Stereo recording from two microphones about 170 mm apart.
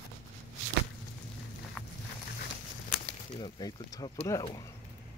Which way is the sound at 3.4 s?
25° left (ahead or behind).